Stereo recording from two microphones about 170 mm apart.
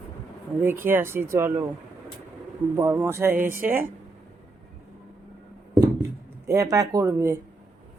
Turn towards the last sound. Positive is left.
turn(degrees=-15)  # may be behind; listen again after turning